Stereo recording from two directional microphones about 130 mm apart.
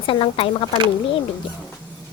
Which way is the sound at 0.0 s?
45° left (ahead or behind).